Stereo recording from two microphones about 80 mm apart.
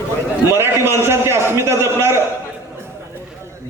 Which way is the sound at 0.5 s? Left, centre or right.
Right.